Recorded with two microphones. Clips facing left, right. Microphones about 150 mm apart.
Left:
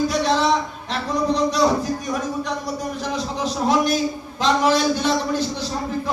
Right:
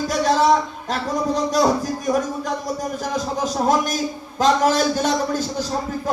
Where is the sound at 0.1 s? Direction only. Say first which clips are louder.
Right 1 dB; 45° right (ahead or behind).